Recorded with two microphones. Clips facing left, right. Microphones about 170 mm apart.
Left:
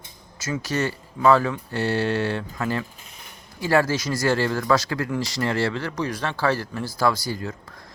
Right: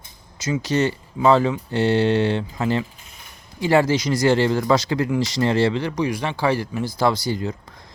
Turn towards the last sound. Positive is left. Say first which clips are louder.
# right 3 dB
turn(degrees=-20)  # may be behind; listen again after turning